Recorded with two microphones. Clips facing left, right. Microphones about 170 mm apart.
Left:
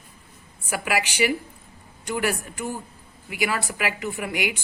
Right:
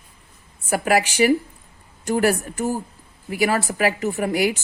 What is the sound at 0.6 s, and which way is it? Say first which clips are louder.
A woman's voice: right 6 dB; 40° right (ahead or behind).